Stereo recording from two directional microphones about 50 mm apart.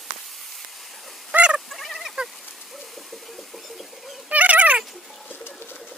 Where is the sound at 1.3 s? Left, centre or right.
Right.